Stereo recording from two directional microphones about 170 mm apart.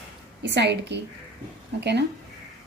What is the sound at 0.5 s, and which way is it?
A woman's voice, 90° right.